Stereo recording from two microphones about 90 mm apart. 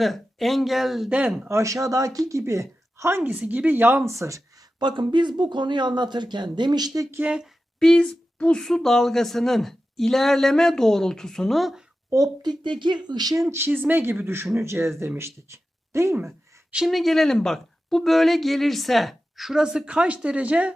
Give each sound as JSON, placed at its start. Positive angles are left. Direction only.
{"t": 0.0, "sound": "a woman's voice", "side_deg": 0}
{"t": 1.5, "sound": "speech", "side_deg": -35}
{"t": 3.3, "sound": "speech", "side_deg": -15}
{"t": 4.8, "sound": "speech", "side_deg": -60}
{"t": 7.2, "sound": "speech", "side_deg": -10}
{"t": 7.8, "sound": "a woman's voice", "side_deg": 5}
{"t": 12.4, "sound": "speech", "side_deg": -55}
{"t": 16.7, "sound": "a woman's voice", "side_deg": 0}